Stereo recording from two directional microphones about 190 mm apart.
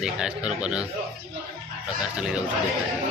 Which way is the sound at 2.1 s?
5° right (ahead or behind).